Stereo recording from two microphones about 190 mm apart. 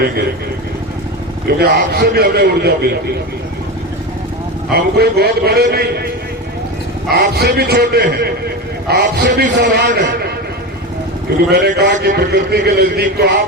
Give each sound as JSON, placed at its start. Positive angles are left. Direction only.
{"t": 1.5, "sound": "a man's voice", "side_deg": -55}
{"t": 4.7, "sound": "a man's voice", "side_deg": -55}
{"t": 7.1, "sound": "a man's voice", "side_deg": -60}
{"t": 11.5, "sound": "a man's voice", "side_deg": -60}